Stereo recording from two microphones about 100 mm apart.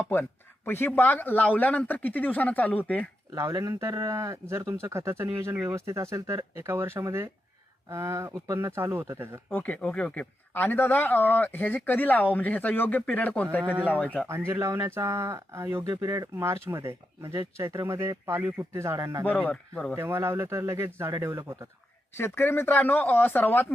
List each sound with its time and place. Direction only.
0.1 s a man's voice: 20° left (ahead or behind)
3.3 s speech: 30° right (ahead or behind)
9.5 s a man's voice: 15° left (ahead or behind)
14.3 s speech: 25° right (ahead or behind)
19.2 s a man's voice: 15° left (ahead or behind)
20.0 s speech: 25° right (ahead or behind)
22.2 s speech: 25° left (ahead or behind)